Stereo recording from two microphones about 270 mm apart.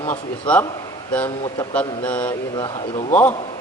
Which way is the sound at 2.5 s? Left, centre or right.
Centre.